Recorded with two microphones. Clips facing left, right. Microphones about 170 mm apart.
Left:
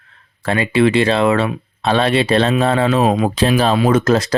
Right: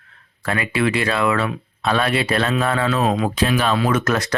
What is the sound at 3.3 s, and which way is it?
Speech, 30° left (ahead or behind).